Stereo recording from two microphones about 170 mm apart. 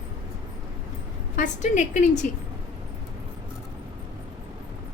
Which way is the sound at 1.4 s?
45° left (ahead or behind).